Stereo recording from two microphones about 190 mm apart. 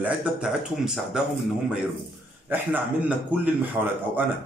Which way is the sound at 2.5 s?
10° right (ahead or behind).